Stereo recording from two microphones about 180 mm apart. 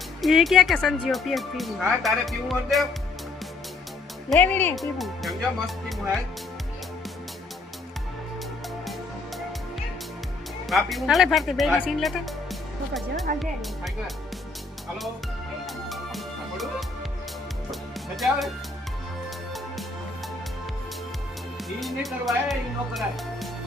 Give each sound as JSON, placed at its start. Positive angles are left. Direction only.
{"t": 0.2, "sound": "speech", "side_deg": 0}
{"t": 4.3, "sound": "speech", "side_deg": 10}
{"t": 10.7, "sound": "speech", "side_deg": 0}
{"t": 15.6, "sound": "music", "side_deg": 0}
{"t": 18.2, "sound": "speech", "side_deg": 0}
{"t": 21.8, "sound": "speech", "side_deg": 0}